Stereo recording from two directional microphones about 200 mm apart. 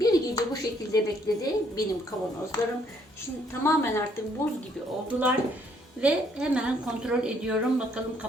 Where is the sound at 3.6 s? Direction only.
15° left (ahead or behind).